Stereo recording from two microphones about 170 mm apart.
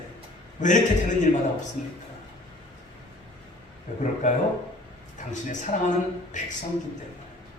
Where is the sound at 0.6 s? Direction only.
45° left (ahead or behind).